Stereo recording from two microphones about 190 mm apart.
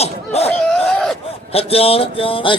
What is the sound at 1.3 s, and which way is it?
Speech, 30° left (ahead or behind).